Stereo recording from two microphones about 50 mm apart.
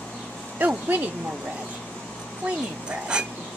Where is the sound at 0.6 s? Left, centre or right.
Right.